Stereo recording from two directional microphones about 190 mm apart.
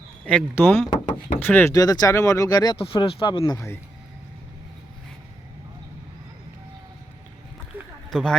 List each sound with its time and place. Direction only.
0.3 s speech: 10° left (ahead or behind)
8.1 s speech: 5° left (ahead or behind)